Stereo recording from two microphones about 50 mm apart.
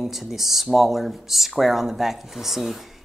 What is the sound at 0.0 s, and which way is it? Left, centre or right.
A man's voice, centre.